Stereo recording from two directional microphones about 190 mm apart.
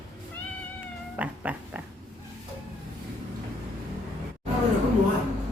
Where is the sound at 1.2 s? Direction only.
10° right (ahead or behind).